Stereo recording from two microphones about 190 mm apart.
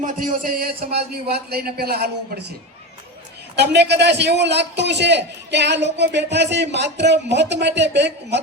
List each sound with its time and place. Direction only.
0.0 s a man's voice: 45° right (ahead or behind)
3.5 s a man's voice: 60° right (ahead or behind)